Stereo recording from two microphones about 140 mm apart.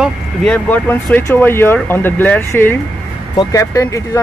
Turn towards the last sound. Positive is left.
turn(degrees=25)  # may be behind; listen again after turning